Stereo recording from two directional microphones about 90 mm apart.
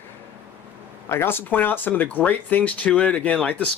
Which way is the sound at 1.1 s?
25° left (ahead or behind).